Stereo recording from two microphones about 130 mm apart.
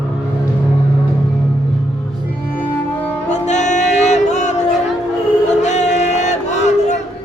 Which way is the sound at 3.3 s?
65° left (ahead or behind).